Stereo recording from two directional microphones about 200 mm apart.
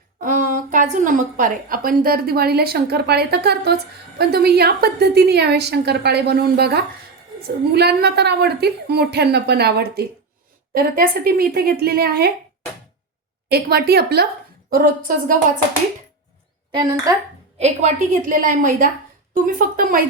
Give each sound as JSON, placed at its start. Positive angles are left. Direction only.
{"t": 0.2, "sound": "a woman's voice", "side_deg": -45}
{"t": 13.5, "sound": "a woman's voice", "side_deg": -50}
{"t": 16.7, "sound": "speech", "side_deg": -15}
{"t": 17.6, "sound": "a woman's voice", "side_deg": -35}